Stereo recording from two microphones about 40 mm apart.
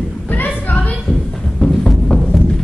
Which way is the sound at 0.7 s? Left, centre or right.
Left.